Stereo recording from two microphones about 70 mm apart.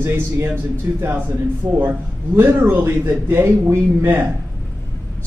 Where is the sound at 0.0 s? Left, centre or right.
Right.